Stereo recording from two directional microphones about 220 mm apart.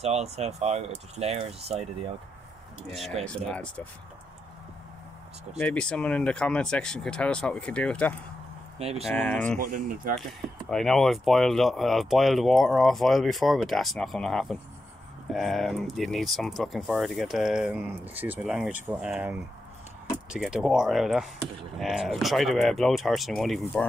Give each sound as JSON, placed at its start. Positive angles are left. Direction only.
{"t": 0.0, "sound": "speech", "side_deg": -30}
{"t": 3.3, "sound": "speech", "side_deg": 5}
{"t": 5.6, "sound": "speech", "side_deg": 5}
{"t": 8.7, "sound": "speech", "side_deg": -25}
{"t": 9.0, "sound": "speech", "side_deg": 5}
{"t": 9.6, "sound": "speech", "side_deg": -40}
{"t": 10.7, "sound": "speech", "side_deg": 0}